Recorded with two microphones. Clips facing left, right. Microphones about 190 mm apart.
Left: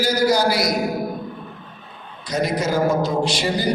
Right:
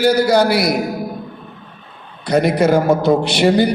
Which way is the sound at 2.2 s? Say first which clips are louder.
Right 8 dB; 60° right (ahead or behind).